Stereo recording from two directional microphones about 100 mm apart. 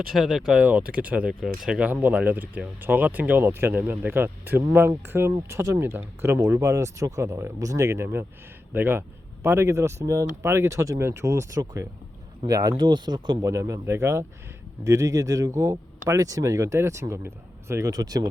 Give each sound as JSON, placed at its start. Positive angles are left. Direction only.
{"t": 0.1, "sound": "speech", "side_deg": -5}
{"t": 13.4, "sound": "speech", "side_deg": -30}